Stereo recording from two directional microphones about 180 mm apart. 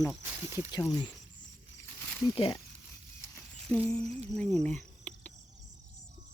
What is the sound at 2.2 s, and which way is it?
Speech, 30° left (ahead or behind).